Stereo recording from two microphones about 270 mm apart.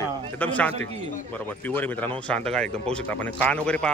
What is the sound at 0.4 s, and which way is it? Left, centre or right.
Speech, centre.